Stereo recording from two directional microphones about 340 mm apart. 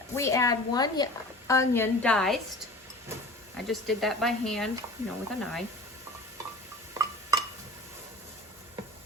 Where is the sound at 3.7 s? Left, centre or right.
Centre.